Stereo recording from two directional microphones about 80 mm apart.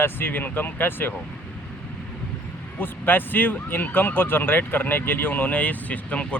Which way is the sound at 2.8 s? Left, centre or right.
Left.